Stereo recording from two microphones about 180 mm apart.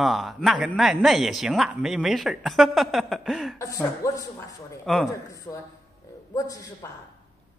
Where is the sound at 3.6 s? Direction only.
20° left (ahead or behind).